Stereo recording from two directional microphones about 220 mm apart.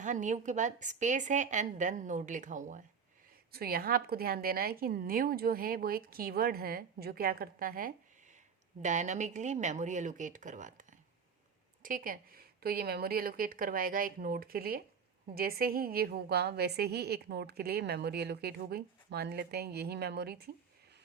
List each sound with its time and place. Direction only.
0.0 s a woman's voice: 35° right (ahead or behind)